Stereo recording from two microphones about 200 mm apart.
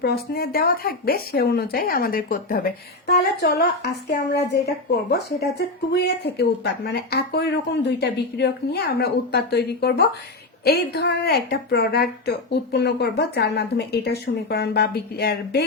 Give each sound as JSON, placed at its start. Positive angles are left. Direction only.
{"t": 0.0, "sound": "a woman's voice", "side_deg": 50}